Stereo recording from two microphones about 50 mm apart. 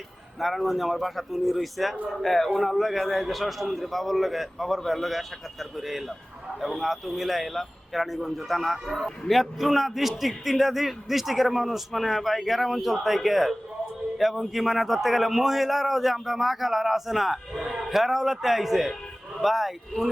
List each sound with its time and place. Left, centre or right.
0.3 s speech: centre